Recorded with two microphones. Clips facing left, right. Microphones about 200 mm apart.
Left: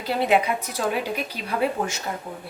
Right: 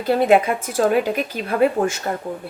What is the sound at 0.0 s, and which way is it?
A woman's voice, 50° right (ahead or behind).